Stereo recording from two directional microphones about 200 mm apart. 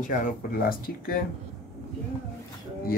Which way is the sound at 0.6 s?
45° left (ahead or behind).